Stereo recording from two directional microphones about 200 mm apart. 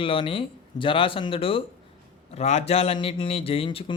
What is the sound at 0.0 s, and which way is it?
Speech, 25° left (ahead or behind).